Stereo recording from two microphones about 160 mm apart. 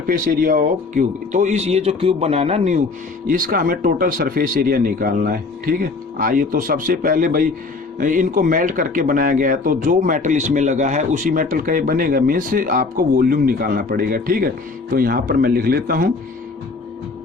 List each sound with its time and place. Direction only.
0.1 s speech: 60° right (ahead or behind); by 2.8 s 45° right (ahead or behind)
3.2 s speech: 60° right (ahead or behind)